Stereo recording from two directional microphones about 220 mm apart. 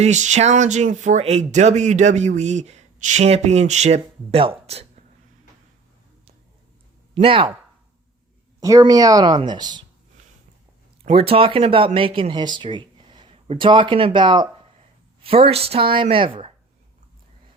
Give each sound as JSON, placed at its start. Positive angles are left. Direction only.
{"t": 0.0, "sound": "speech", "side_deg": -35}
{"t": 7.1, "sound": "speech", "side_deg": -25}
{"t": 8.6, "sound": "speech", "side_deg": -15}
{"t": 11.0, "sound": "speech", "side_deg": -25}